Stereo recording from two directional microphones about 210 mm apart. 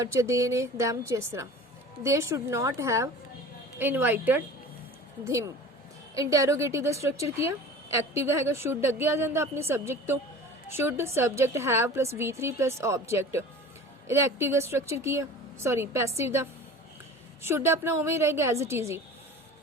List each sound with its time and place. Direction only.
0.0 s a woman's voice: 15° right (ahead or behind)